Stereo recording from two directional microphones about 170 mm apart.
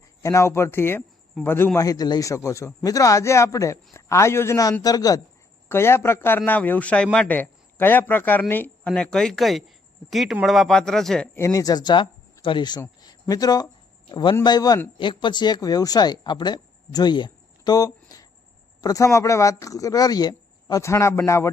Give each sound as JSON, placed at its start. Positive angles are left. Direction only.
{"t": 0.2, "sound": "a man's voice", "side_deg": 20}
{"t": 11.3, "sound": "speech", "side_deg": 20}
{"t": 13.0, "sound": "a sound", "side_deg": 20}
{"t": 14.1, "sound": "speech", "side_deg": 30}